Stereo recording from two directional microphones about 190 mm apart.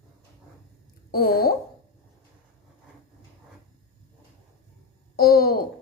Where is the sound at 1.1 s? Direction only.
50° left (ahead or behind).